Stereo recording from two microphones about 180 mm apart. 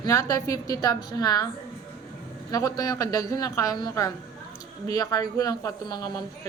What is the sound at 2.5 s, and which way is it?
A woman's voice, 20° left (ahead or behind).